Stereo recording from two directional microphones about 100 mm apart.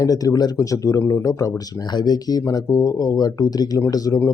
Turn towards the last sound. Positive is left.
turn(degrees=40)  # may be behind; listen again after turning